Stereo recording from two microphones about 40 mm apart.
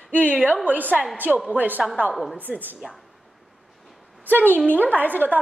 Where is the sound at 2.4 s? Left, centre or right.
Right.